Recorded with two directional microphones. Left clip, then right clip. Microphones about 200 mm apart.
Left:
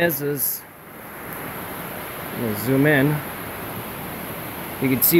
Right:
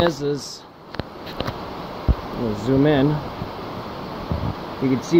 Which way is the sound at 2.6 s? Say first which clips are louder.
Even; centre (ahead or behind).